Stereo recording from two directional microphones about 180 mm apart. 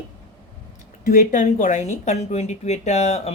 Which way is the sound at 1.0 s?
45° left (ahead or behind).